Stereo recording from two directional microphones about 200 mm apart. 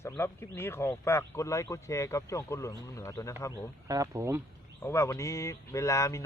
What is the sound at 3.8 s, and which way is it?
Speech, 15° right (ahead or behind).